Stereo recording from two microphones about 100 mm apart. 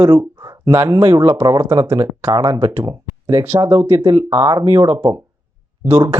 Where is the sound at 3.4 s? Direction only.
25° right (ahead or behind).